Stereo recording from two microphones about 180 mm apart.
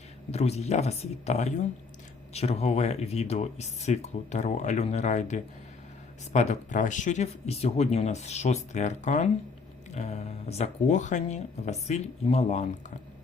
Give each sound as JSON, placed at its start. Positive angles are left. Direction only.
{"t": 0.3, "sound": "speech", "side_deg": 35}